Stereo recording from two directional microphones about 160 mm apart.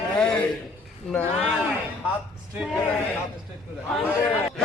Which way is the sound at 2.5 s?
5° right (ahead or behind).